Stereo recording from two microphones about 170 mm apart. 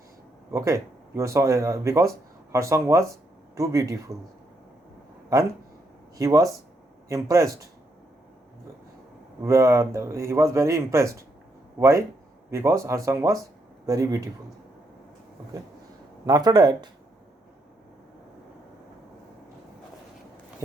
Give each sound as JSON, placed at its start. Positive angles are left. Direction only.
{"t": 0.5, "sound": "speech", "side_deg": -15}
{"t": 6.1, "sound": "speech", "side_deg": -20}
{"t": 9.4, "sound": "speech", "side_deg": -15}
{"t": 16.2, "sound": "speech", "side_deg": -20}